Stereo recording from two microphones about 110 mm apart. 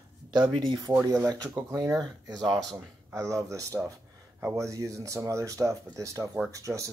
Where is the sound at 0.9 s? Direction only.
40° right (ahead or behind).